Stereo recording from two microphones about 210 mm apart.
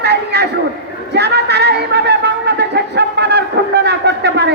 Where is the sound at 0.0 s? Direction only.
50° right (ahead or behind).